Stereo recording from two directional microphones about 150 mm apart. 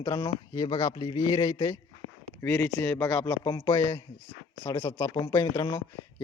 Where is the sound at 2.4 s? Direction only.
15° left (ahead or behind).